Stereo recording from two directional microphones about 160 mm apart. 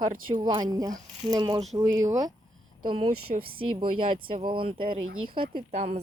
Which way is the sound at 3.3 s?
70° right (ahead or behind).